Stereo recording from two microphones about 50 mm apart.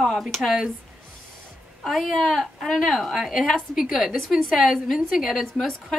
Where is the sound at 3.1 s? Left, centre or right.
Centre.